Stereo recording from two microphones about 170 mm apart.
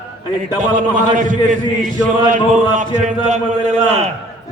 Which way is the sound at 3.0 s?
45° right (ahead or behind).